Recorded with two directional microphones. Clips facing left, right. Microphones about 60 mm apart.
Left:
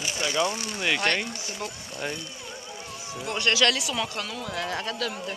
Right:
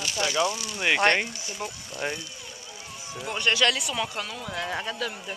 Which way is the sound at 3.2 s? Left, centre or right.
Centre.